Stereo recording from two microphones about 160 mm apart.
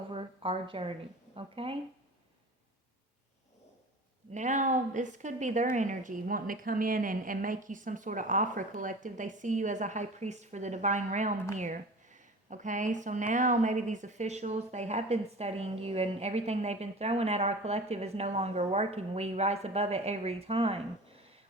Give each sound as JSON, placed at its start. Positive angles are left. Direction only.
{"t": 0.1, "sound": "speech", "side_deg": -35}
{"t": 4.3, "sound": "speech", "side_deg": -50}